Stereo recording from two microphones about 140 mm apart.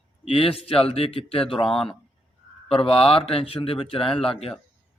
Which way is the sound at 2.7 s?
40° left (ahead or behind).